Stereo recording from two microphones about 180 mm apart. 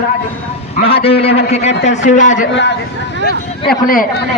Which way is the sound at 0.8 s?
30° left (ahead or behind).